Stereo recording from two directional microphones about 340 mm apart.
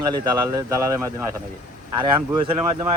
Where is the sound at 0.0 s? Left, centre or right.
Centre.